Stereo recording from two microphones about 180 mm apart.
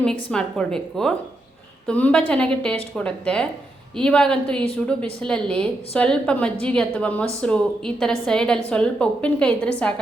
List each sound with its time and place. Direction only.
0.3 s a woman's voice: 5° left (ahead or behind)